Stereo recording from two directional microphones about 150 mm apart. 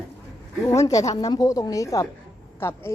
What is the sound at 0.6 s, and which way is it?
A woman's voice, 20° left (ahead or behind).